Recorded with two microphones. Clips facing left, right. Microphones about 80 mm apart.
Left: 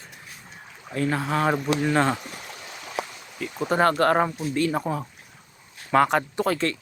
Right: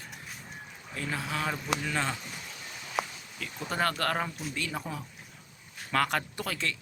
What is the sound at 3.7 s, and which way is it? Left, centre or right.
Speech, left.